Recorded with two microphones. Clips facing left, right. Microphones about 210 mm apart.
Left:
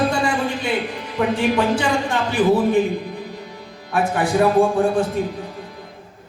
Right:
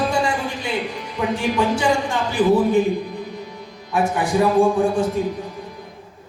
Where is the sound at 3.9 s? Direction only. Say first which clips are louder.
Left 1 dB; 60° left (ahead or behind).